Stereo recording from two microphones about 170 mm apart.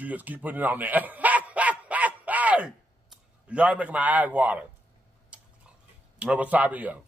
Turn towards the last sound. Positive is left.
turn(degrees=-10)  # may be behind; listen again after turning